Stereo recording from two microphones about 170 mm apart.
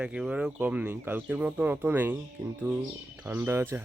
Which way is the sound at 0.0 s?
5° right (ahead or behind).